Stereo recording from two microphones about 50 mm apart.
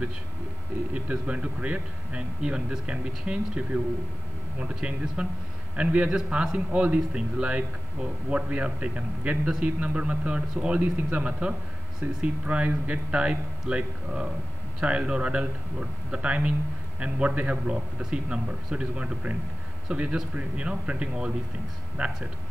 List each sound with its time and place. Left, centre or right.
1.1 s speech: right
6.0 s a man's voice: centre
6.7 s speech: right